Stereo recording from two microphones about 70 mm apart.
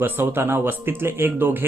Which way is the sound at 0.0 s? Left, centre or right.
Right.